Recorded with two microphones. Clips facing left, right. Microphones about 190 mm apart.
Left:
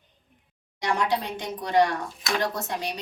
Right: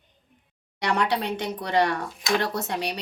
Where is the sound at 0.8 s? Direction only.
65° right (ahead or behind).